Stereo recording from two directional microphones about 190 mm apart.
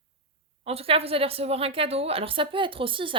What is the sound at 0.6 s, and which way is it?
Speech, 30° right (ahead or behind).